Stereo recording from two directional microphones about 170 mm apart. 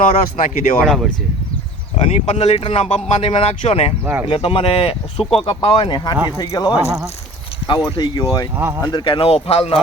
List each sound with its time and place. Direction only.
0.0 s speech: 50° left (ahead or behind)
0.8 s speech: centre (ahead or behind)
2.0 s speech: 40° left (ahead or behind); by 8.4 s 25° left (ahead or behind)
8.5 s speech: 15° right (ahead or behind)
8.9 s speech: 25° left (ahead or behind)